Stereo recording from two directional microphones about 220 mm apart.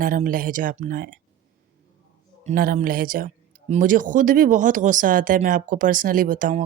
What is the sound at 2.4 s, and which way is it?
Speech, 40° right (ahead or behind).